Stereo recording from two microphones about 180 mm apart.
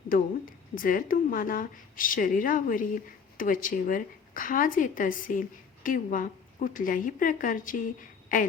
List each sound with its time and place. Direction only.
0.1 s speech: 50° left (ahead or behind)